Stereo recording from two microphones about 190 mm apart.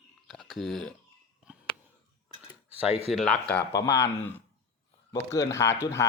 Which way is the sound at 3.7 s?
20° left (ahead or behind).